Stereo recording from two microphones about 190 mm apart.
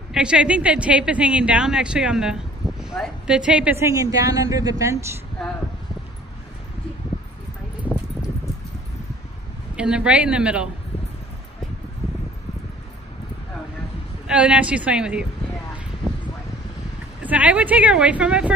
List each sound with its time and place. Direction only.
0.1 s a woman's voice: 5° right (ahead or behind)
9.8 s a woman's voice: 5° right (ahead or behind)
14.2 s a woman's voice: 5° right (ahead or behind)
17.2 s speech: 10° right (ahead or behind)